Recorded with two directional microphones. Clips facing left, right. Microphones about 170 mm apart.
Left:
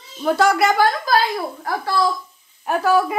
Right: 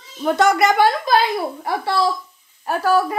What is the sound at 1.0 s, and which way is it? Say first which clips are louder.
A woman's voice: right 1 dB; 25° right (ahead or behind).